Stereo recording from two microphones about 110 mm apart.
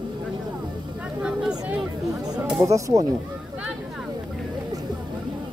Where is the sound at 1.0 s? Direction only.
5° right (ahead or behind).